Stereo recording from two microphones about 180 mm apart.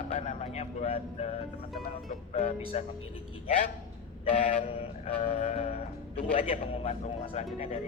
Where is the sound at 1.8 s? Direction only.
45° left (ahead or behind).